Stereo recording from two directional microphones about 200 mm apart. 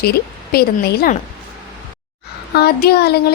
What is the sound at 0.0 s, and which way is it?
Speech, 50° left (ahead or behind).